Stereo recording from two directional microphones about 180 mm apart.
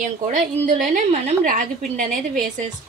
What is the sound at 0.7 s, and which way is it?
A woman's voice, 45° right (ahead or behind).